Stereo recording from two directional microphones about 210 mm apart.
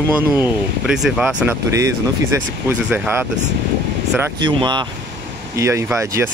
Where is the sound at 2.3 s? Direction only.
15° right (ahead or behind).